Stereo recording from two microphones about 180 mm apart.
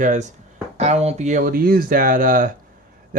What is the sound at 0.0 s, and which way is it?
Speech, 40° right (ahead or behind).